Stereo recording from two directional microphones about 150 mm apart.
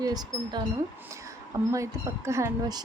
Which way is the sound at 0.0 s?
25° right (ahead or behind).